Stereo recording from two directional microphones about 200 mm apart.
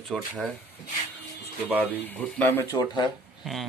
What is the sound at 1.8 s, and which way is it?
Speech, 10° left (ahead or behind).